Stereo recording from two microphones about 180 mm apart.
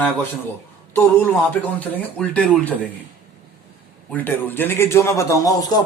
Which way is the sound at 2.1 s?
5° left (ahead or behind).